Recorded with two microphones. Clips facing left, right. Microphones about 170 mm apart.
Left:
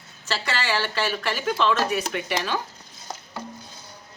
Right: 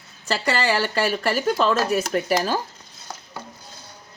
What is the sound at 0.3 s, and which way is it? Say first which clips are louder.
Speech: right 5 dB; 40° right (ahead or behind).